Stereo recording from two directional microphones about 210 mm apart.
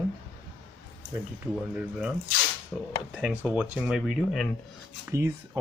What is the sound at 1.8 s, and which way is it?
Speech, 5° right (ahead or behind).